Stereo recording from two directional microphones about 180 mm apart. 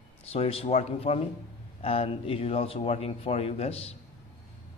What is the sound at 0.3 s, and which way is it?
A man's voice, 35° left (ahead or behind).